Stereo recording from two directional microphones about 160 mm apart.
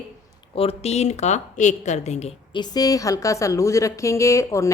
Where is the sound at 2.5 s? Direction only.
25° left (ahead or behind).